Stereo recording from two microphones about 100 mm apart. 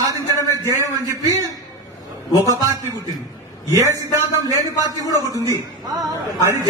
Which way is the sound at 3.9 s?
35° right (ahead or behind).